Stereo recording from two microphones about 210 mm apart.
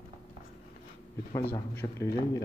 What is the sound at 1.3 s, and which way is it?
Speech, 15° left (ahead or behind).